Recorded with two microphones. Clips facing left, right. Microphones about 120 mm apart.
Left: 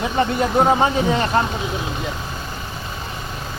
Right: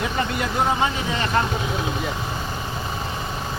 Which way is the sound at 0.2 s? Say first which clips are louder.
Left 8 dB; 35° left (ahead or behind).